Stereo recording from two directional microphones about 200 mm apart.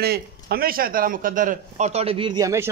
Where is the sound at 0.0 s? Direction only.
50° right (ahead or behind).